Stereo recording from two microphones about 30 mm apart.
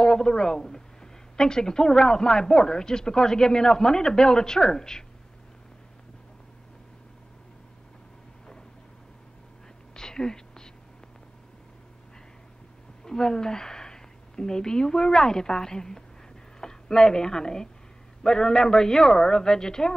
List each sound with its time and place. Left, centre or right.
0.0 s a man's voice: left
9.9 s whispering: left
13.0 s a woman's voice: left